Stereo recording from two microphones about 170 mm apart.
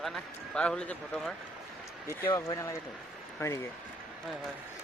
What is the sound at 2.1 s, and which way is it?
Speech, 15° left (ahead or behind).